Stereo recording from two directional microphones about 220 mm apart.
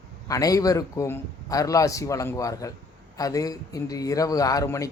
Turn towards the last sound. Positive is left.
turn(degrees=15)  # may be behind; listen again after turning